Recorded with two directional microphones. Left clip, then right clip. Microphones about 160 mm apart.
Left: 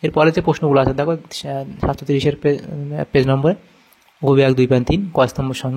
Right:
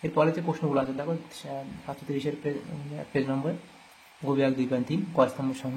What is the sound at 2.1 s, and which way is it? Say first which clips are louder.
Speech: left 12 dB; 70° left (ahead or behind).